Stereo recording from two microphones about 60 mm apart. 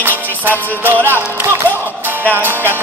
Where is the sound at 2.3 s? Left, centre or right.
Right.